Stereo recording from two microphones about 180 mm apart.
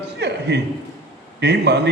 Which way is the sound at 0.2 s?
70° right (ahead or behind).